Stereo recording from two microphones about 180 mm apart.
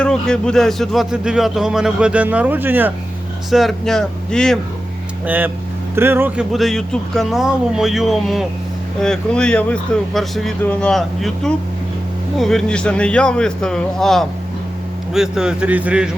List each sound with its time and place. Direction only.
0.0 s speech: 5° left (ahead or behind)
3.5 s speech: centre (ahead or behind)
5.2 s speech: 10° right (ahead or behind)
6.5 s speech: centre (ahead or behind)